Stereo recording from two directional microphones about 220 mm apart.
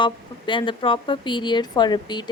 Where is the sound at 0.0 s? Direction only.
20° left (ahead or behind).